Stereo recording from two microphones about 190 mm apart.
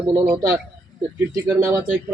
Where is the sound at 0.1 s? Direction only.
15° right (ahead or behind).